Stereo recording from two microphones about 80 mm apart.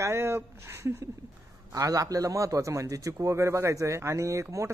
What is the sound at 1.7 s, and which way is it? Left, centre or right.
A man's voice, right.